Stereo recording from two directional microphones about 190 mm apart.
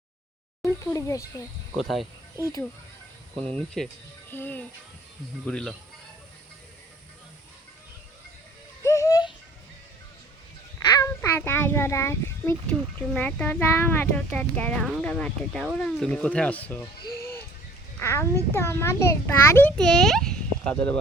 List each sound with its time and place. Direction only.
0.6 s a child's voice: 15° left (ahead or behind)
1.8 s cricket: centre (ahead or behind)
2.4 s a child's voice: 15° left (ahead or behind)
3.3 s cricket: 5° left (ahead or behind)
4.3 s a child's voice: 10° left (ahead or behind)
5.5 s cricket: 5° left (ahead or behind)
8.8 s a sound: 15° left (ahead or behind)
10.8 s a child's voice: 15° left (ahead or behind)
18.0 s a child's voice: 15° left (ahead or behind)